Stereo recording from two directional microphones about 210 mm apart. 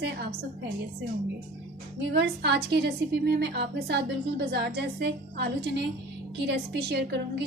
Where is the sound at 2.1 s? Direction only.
55° right (ahead or behind).